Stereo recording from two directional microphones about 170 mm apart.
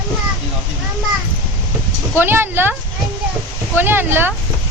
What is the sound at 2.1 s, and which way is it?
Speech, 15° right (ahead or behind).